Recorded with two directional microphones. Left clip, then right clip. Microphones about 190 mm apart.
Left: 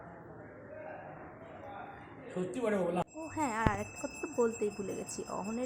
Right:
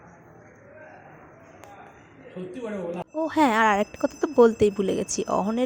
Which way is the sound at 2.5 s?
25° left (ahead or behind).